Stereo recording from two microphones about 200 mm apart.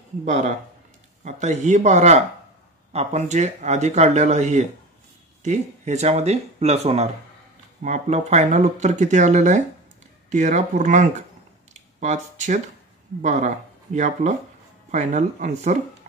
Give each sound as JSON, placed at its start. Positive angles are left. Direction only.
{"t": 0.2, "sound": "speech", "side_deg": -35}
{"t": 11.7, "sound": "a sound", "side_deg": -35}
{"t": 13.2, "sound": "speech", "side_deg": -35}